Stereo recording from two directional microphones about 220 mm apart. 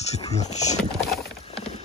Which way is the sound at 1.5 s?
30° left (ahead or behind).